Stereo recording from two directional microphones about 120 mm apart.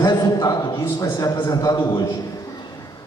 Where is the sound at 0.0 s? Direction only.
35° left (ahead or behind).